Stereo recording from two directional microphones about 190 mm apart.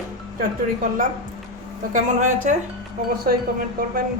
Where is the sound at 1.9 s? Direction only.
40° right (ahead or behind).